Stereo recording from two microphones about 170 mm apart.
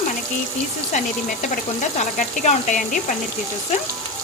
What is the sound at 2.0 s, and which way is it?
Speech, 45° left (ahead or behind).